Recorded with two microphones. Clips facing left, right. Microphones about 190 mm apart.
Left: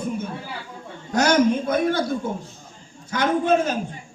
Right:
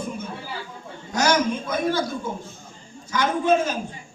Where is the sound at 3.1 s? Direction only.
60° left (ahead or behind).